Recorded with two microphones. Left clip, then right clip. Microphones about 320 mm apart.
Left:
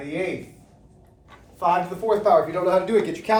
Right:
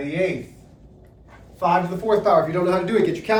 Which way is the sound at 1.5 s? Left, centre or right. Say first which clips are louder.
Right 1 dB; centre.